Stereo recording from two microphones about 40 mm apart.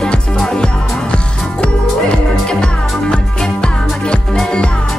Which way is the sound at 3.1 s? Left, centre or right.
Centre.